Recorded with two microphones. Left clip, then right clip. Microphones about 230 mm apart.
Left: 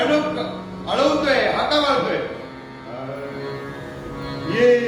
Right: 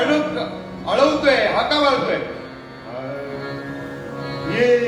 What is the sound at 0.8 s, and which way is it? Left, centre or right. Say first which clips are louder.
Speech: right 2 dB; right.